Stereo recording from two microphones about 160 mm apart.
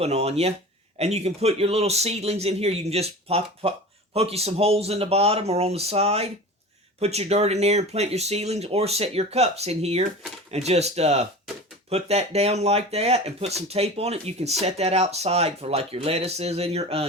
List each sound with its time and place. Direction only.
0.0 s speech: 40° right (ahead or behind)